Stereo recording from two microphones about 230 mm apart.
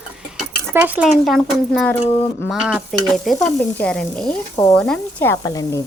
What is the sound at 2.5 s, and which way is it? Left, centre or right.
Speech, centre.